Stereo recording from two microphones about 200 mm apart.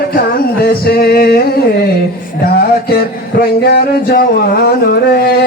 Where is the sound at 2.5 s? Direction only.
50° left (ahead or behind).